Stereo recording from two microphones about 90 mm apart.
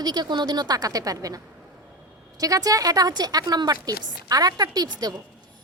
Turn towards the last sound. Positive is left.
turn(degrees=-45)  # may be behind; listen again after turning